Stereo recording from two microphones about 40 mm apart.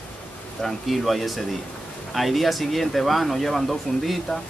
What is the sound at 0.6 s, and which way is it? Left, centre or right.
A man's voice, centre.